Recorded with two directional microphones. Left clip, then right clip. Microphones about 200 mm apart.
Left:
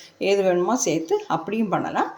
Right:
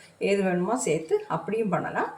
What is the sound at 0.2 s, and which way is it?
Speech, 40° left (ahead or behind).